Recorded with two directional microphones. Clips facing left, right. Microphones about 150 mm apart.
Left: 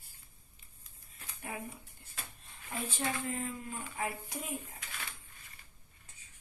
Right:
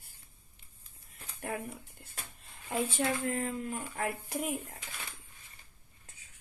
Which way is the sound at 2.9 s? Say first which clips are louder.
Right 1 dB; 90° right.